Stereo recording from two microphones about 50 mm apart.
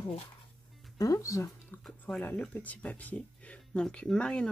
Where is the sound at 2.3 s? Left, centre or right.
Left.